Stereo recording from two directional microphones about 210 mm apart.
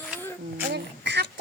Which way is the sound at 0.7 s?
55° right (ahead or behind).